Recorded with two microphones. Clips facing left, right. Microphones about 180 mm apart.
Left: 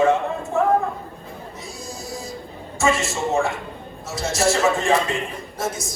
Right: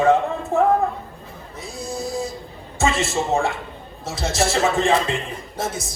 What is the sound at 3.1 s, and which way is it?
A man's voice, 35° right (ahead or behind).